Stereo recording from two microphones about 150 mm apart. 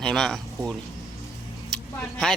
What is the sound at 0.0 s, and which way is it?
Speech, 5° left (ahead or behind).